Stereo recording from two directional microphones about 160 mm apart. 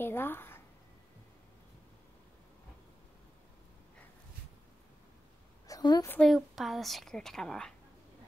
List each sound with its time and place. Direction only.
0.0 s a woman's voice: 15° left (ahead or behind)
5.7 s a sound: 25° left (ahead or behind)
6.0 s a woman's voice: 10° left (ahead or behind)
6.3 s a woman's voice: centre (ahead or behind)